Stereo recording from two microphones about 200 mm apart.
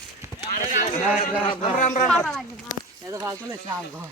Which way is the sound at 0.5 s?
40° left (ahead or behind).